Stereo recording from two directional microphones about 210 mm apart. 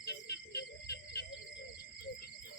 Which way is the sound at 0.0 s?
50° left (ahead or behind).